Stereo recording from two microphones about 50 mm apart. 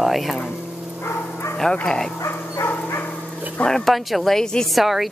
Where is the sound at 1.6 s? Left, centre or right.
Centre.